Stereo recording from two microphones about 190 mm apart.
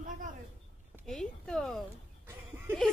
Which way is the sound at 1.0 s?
5° left (ahead or behind).